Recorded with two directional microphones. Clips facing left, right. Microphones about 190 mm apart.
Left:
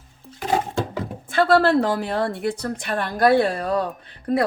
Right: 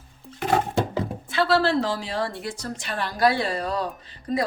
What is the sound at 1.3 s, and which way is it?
A woman's voice, 50° left (ahead or behind).